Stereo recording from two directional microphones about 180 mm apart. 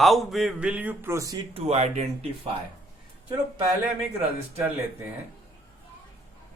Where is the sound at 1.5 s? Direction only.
35° right (ahead or behind).